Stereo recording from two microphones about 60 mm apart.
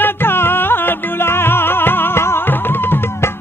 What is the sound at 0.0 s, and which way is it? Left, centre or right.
Music, left.